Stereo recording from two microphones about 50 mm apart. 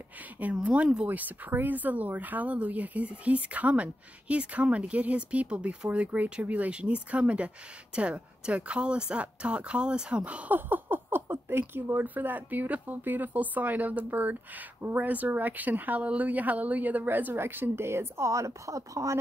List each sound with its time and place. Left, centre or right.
0.6 s speech: right
1.0 s speech: right
10.5 s a woman's voice: right